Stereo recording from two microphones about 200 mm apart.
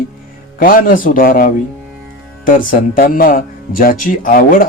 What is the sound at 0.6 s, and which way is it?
Speech, 45° left (ahead or behind).